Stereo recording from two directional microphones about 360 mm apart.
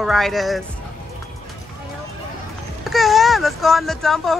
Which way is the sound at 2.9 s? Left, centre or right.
Centre.